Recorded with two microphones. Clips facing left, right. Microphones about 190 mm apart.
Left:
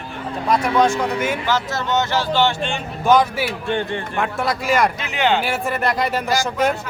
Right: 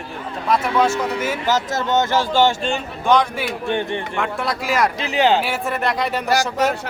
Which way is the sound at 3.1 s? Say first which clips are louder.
Left 2 dB; 5° left (ahead or behind).